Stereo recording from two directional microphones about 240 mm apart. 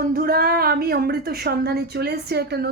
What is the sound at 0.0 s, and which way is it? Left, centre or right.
A woman's voice, right.